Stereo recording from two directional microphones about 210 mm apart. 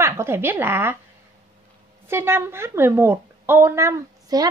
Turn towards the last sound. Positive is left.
turn(degrees=-15)  # may be behind; listen again after turning